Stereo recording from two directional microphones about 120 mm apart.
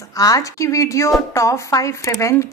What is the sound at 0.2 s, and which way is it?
Speech, 30° left (ahead or behind).